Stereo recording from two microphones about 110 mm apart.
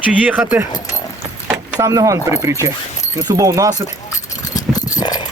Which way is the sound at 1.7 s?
30° right (ahead or behind).